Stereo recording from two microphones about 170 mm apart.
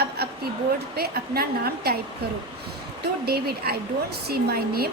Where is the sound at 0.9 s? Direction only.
65° right (ahead or behind).